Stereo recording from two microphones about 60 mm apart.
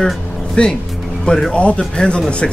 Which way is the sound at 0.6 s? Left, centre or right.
Centre.